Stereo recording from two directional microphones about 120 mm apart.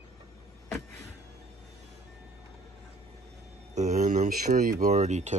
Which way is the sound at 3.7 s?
80° right.